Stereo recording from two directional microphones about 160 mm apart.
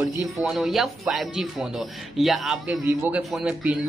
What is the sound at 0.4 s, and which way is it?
Speech, 5° right (ahead or behind).